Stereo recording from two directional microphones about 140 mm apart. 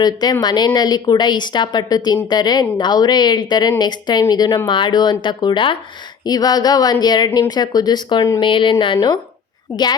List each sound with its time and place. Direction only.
0.0 s a woman's voice: 30° left (ahead or behind)